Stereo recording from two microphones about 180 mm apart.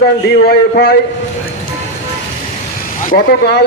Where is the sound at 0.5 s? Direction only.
60° left (ahead or behind).